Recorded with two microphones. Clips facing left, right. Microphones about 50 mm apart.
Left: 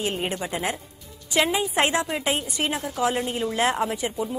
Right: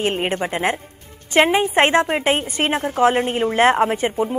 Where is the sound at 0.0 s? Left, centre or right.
Right.